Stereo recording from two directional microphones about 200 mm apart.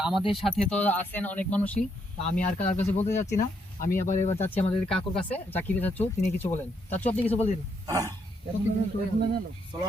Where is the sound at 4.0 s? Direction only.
35° left (ahead or behind).